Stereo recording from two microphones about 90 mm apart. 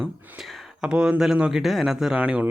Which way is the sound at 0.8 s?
10° right (ahead or behind).